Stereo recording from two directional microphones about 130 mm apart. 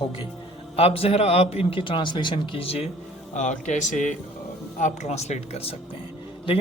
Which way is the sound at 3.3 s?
70° left (ahead or behind).